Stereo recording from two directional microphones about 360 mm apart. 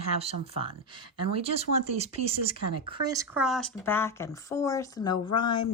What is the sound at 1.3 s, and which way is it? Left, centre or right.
Speech, centre.